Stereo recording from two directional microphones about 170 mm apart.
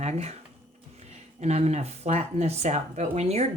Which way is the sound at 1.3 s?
40° right (ahead or behind).